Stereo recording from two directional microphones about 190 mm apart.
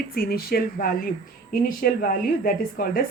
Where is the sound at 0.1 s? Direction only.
50° left (ahead or behind).